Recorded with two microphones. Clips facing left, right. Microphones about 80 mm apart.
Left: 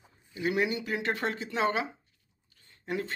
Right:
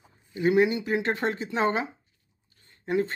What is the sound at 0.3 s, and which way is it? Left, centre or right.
Speech, right.